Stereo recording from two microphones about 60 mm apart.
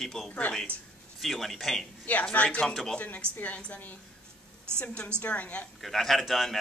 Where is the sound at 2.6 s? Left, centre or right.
Centre.